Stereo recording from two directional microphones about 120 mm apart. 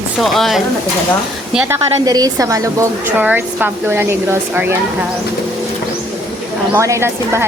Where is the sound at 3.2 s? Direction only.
15° right (ahead or behind).